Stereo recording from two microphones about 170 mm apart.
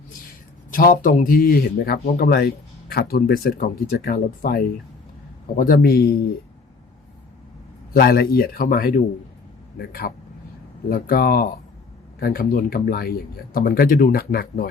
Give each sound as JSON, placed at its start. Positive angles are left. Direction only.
{"t": 0.7, "sound": "speech", "side_deg": 55}
{"t": 7.9, "sound": "speech", "side_deg": 65}